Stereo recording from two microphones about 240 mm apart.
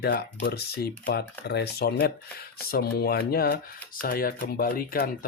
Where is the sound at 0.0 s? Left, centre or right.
Left.